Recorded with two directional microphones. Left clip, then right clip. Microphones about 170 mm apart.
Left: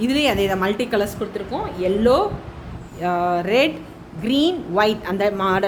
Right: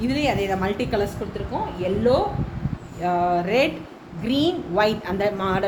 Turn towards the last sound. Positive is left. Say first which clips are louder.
# left 4 dB
turn(degrees=40)  # may be behind; listen again after turning